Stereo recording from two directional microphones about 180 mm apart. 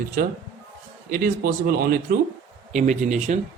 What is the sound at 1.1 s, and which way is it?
A man's voice, 50° right (ahead or behind).